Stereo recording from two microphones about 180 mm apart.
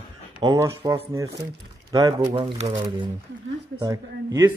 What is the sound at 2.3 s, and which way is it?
Speech, 30° right (ahead or behind).